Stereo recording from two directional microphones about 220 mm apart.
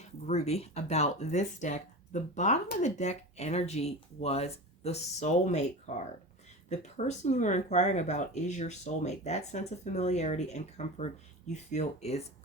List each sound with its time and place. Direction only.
0.0 s speech: 30° left (ahead or behind)